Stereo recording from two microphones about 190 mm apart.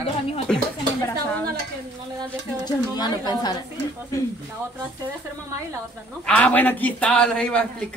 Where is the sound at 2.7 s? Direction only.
20° left (ahead or behind).